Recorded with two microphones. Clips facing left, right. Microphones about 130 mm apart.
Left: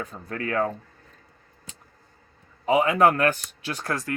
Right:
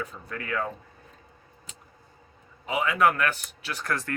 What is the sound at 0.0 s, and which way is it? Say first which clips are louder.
Speech: left 4 dB; 40° left (ahead or behind).